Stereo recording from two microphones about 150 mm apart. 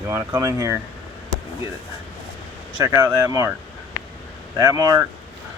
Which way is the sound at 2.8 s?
15° right (ahead or behind).